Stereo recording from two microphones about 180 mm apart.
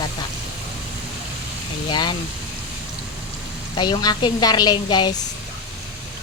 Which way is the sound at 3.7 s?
25° left (ahead or behind).